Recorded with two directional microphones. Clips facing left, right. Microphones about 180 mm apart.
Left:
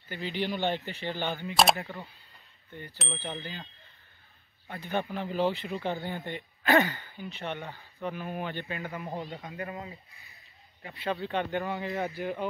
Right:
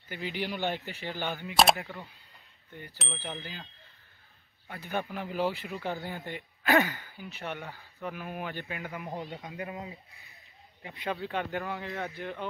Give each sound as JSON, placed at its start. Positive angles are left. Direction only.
{"t": 0.1, "sound": "speech", "side_deg": -10}
{"t": 4.6, "sound": "speech", "side_deg": -10}
{"t": 7.5, "sound": "speech", "side_deg": 20}
{"t": 8.0, "sound": "speech", "side_deg": -5}
{"t": 11.1, "sound": "speech", "side_deg": 0}